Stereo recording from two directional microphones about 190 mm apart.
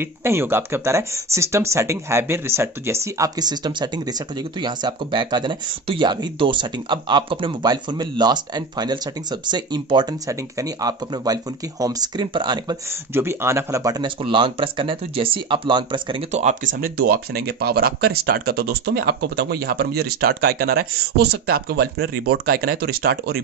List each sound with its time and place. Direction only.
0.0 s speech: 15° right (ahead or behind); by 23.4 s 55° right (ahead or behind)